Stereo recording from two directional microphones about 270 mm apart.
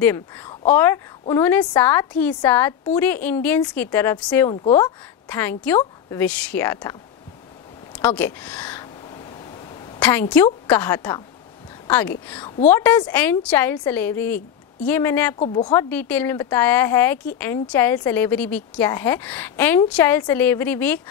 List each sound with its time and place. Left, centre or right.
0.0 s speech: centre
4.5 s a woman's voice: centre
5.3 s speech: centre
8.0 s speech: centre
9.9 s a sound: centre
10.3 s speech: centre
12.3 s a woman's voice: centre
15.3 s speech: left; by 21.0 s centre